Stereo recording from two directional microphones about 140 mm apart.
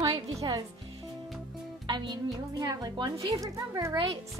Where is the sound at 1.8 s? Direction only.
30° right (ahead or behind).